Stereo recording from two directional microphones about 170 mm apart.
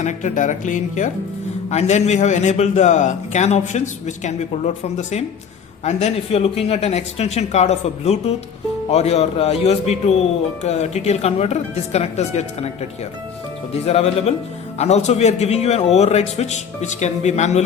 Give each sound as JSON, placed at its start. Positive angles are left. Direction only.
{"t": 0.0, "sound": "a man's voice", "side_deg": 45}
{"t": 13.8, "sound": "speech", "side_deg": 35}